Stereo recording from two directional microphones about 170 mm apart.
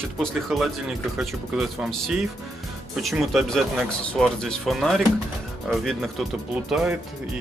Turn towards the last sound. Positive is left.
turn(degrees=-5)  # may be behind; listen again after turning